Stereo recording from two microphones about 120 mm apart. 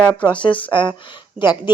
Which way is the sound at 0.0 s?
10° left (ahead or behind).